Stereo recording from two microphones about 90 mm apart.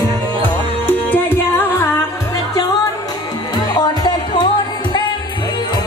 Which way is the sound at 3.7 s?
55° left (ahead or behind).